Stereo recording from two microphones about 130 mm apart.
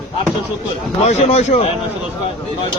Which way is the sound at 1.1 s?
55° left (ahead or behind).